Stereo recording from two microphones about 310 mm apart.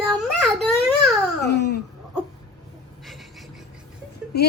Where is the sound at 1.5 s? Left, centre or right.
Left.